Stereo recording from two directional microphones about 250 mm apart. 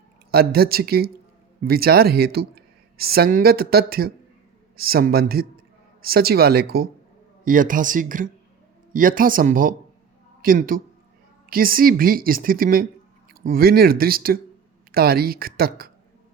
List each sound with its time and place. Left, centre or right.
0.3 s speech: right